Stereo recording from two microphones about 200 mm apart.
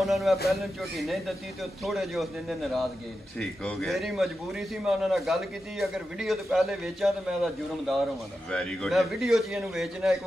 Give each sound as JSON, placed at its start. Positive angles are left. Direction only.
{"t": 0.0, "sound": "a man's voice", "side_deg": 0}
{"t": 3.3, "sound": "a man's voice", "side_deg": 5}